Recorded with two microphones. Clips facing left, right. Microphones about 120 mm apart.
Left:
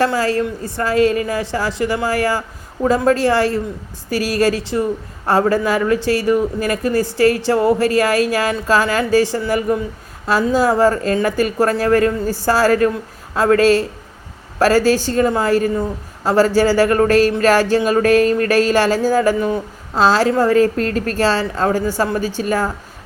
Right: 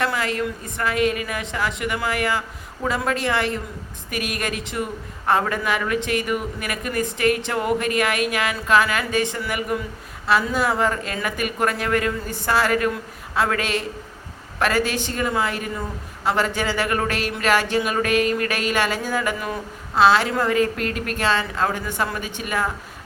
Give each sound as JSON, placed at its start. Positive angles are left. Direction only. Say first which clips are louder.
{"t": 0.0, "sound": "speech", "louder": "left 7 dB", "side_deg": 30}